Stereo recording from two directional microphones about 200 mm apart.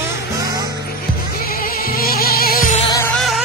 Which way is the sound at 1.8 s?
50° left (ahead or behind).